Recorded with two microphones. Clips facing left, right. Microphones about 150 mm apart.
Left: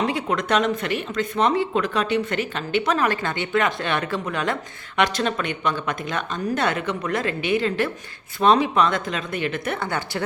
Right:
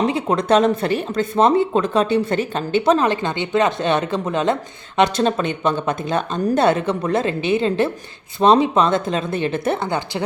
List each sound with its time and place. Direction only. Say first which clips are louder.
0.0 s speech: right 4 dB; 30° right (ahead or behind)